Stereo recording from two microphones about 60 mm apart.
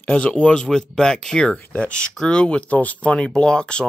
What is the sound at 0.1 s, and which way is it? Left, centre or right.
Speech, centre.